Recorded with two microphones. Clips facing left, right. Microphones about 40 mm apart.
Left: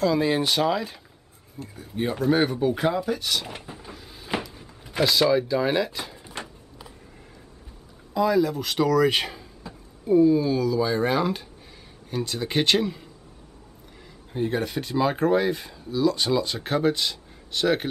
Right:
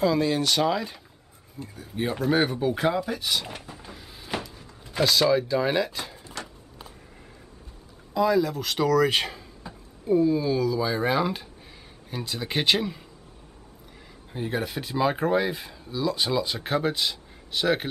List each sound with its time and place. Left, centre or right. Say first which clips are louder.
0.2 s speech: left 1 dB; centre
0.6 s speech: left 1 dB; centre
3.9 s cupboard open or close: left 1 dB; centre
4.3 s speech: left 3 dB; centre
6.2 s a sound: left 1 dB; left
8.1 s speech: left 1 dB; centre
14.3 s speech: left 3 dB; centre